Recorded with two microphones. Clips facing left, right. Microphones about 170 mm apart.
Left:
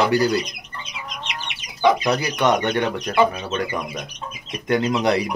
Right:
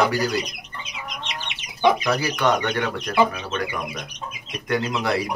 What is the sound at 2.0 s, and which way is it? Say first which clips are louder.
Speech: left 2 dB; 20° left (ahead or behind).